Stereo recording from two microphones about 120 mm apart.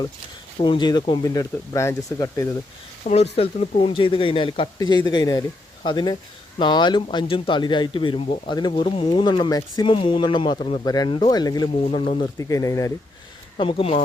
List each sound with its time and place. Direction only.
0.6 s speech: 40° left (ahead or behind)
1.2 s speech: 30° left (ahead or behind)
3.0 s speech: 65° left (ahead or behind); by 12.9 s 25° left (ahead or behind)
13.6 s speech: 50° left (ahead or behind)